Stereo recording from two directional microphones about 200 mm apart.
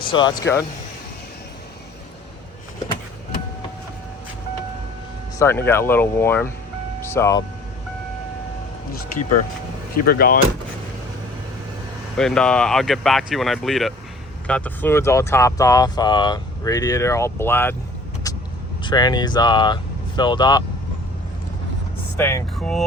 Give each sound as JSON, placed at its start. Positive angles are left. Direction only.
{"t": 0.0, "sound": "speech", "side_deg": 25}
{"t": 5.4, "sound": "speech", "side_deg": 10}
{"t": 10.1, "sound": "speech", "side_deg": 50}
{"t": 12.1, "sound": "speech", "side_deg": 5}
{"t": 18.8, "sound": "speech", "side_deg": 20}
{"t": 22.2, "sound": "speech", "side_deg": 15}